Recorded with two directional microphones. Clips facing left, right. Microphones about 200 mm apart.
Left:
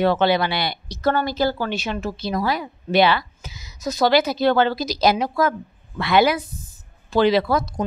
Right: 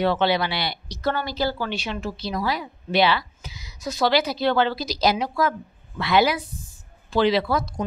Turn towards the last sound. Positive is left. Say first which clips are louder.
# left 3 dB
turn(degrees=45)  # may be behind; listen again after turning